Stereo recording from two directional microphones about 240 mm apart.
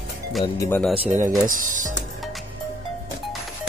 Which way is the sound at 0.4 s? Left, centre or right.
Centre.